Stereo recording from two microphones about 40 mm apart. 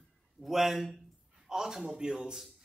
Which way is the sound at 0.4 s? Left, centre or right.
Centre.